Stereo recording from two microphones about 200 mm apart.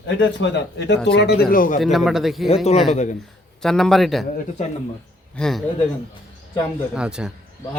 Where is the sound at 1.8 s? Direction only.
Centre (ahead or behind).